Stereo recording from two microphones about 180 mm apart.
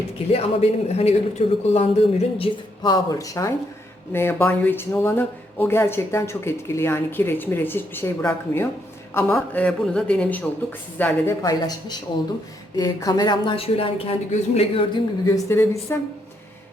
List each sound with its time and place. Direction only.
0.3 s speech: 35° left (ahead or behind)
15.3 s speech: 15° left (ahead or behind)